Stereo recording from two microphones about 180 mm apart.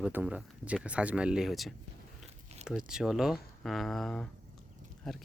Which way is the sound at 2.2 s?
35° right (ahead or behind).